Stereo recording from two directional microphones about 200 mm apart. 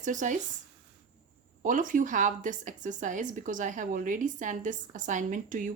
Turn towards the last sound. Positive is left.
turn(degrees=-40)  # may be behind; listen again after turning